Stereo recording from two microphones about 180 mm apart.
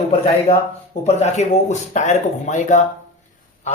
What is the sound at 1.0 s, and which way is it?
Speech, 40° left (ahead or behind).